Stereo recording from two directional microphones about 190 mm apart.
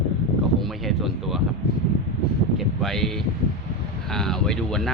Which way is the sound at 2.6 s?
Centre (ahead or behind).